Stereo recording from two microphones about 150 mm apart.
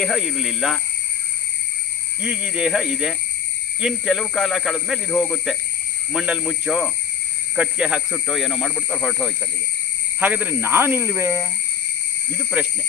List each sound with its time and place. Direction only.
0.0 s a man's voice: centre (ahead or behind)
2.2 s a man's voice: 5° right (ahead or behind)
10.2 s speech: 10° right (ahead or behind)